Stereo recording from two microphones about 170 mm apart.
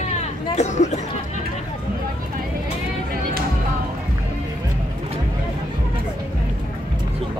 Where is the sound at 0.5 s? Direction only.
45° left (ahead or behind).